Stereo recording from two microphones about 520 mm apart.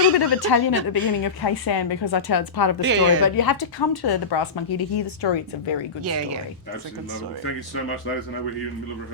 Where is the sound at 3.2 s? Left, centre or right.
Left.